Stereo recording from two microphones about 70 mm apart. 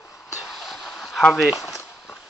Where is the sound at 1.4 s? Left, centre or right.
Centre.